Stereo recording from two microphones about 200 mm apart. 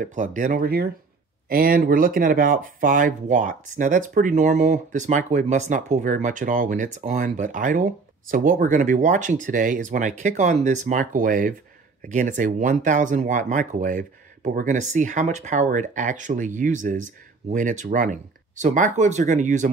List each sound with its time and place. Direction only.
0.0 s speech: 40° right (ahead or behind)